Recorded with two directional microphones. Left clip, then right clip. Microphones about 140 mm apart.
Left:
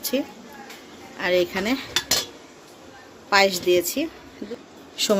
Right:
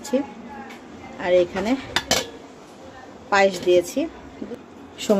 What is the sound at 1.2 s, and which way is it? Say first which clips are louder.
Speech: right 2 dB; 10° left (ahead or behind).